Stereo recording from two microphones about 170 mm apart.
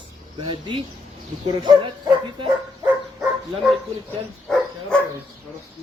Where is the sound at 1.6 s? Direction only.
25° right (ahead or behind).